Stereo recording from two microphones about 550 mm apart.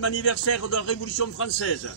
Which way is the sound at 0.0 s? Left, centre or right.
Left.